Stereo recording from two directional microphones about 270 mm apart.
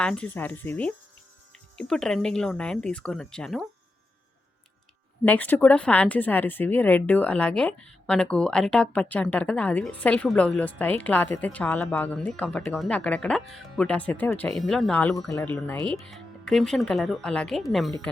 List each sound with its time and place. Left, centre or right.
0.0 s speech: centre
5.2 s speech: centre